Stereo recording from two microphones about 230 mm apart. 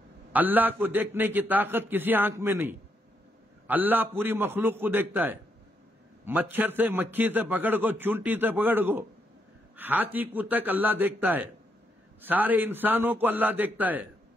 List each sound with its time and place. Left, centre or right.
0.3 s a man's voice: centre
6.5 s a man's voice: centre